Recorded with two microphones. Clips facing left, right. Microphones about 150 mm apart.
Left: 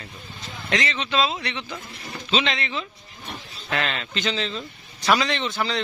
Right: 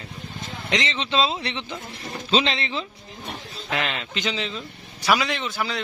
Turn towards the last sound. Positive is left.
turn(degrees=-5)  # may be behind; listen again after turning